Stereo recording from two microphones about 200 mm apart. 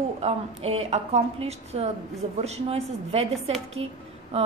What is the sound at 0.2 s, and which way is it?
A woman's voice, 30° right (ahead or behind).